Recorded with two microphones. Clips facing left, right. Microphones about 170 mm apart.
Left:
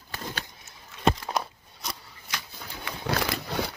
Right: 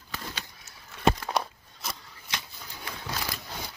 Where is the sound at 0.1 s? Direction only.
50° left (ahead or behind).